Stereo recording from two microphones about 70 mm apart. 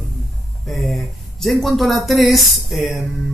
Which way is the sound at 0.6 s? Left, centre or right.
Centre.